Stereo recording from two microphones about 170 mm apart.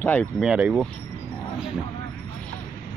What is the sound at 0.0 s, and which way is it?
Speech, 10° left (ahead or behind).